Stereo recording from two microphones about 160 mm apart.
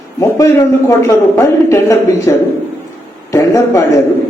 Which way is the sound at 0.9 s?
20° left (ahead or behind).